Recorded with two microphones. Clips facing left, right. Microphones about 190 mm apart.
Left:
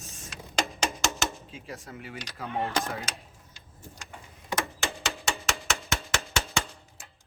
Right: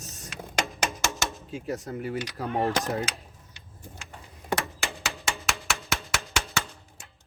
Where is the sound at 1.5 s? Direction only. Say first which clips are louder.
Right 9 dB; 45° right (ahead or behind).